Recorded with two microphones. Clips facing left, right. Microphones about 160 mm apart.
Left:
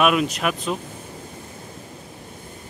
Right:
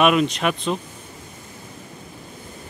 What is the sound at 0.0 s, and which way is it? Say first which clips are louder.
Speech: right 2 dB; 5° left (ahead or behind).